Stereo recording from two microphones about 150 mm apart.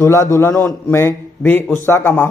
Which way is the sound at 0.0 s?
20° left (ahead or behind).